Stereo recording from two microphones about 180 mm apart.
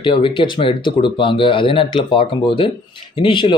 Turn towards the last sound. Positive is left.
turn(degrees=30)  # may be behind; listen again after turning